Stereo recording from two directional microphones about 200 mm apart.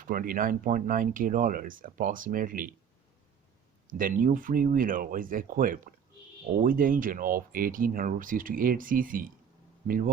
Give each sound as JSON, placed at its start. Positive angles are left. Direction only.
{"t": 0.0, "sound": "speech", "side_deg": -45}
{"t": 3.8, "sound": "speech", "side_deg": -45}